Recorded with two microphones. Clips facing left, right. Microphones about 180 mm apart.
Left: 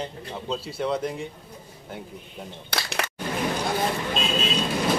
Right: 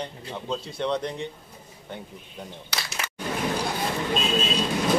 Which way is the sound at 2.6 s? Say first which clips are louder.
Left 7 dB; 60° left (ahead or behind).